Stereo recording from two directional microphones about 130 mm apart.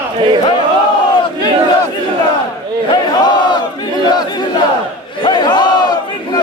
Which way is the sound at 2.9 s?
35° left (ahead or behind).